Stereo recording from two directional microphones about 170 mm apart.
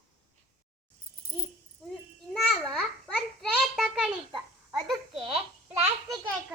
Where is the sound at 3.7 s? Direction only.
Centre (ahead or behind).